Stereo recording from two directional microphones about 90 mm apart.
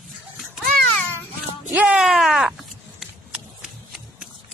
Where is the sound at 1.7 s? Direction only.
10° right (ahead or behind).